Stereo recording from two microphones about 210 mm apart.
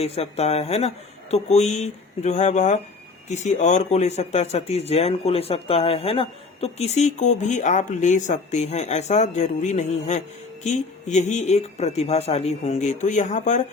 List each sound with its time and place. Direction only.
0.0 s speech: 30° left (ahead or behind)